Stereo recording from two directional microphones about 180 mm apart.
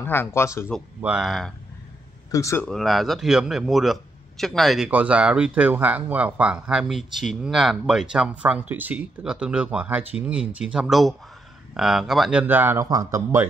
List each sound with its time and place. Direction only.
0.0 s speech: 10° left (ahead or behind)
1.0 s speech: 5° right (ahead or behind)
2.3 s speech: 15° left (ahead or behind)
2.6 s speech: centre (ahead or behind); by 13.5 s 15° right (ahead or behind)